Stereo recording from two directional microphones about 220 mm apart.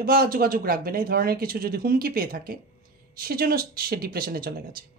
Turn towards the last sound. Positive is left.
turn(degrees=-40)  # may be behind; listen again after turning